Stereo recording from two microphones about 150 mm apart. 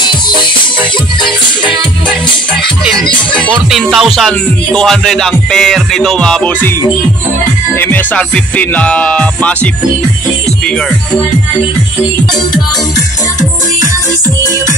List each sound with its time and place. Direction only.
0.0 s music: 30° left (ahead or behind)
3.0 s music: 10° left (ahead or behind)
7.7 s music: 15° left (ahead or behind)